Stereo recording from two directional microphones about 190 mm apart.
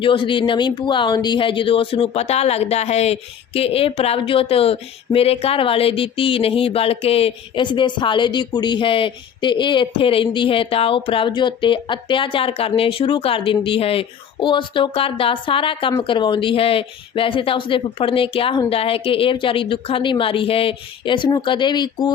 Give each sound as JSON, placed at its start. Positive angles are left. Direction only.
{"t": 0.0, "sound": "speech", "side_deg": 25}